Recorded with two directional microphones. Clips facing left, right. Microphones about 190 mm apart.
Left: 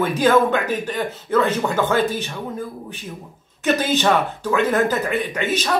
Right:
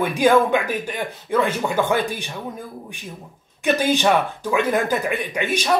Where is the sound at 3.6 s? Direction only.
15° right (ahead or behind).